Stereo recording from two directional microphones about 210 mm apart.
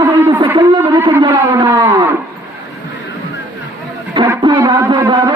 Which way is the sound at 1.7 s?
15° right (ahead or behind).